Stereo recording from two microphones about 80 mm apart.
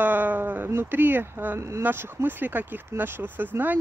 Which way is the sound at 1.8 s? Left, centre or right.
Right.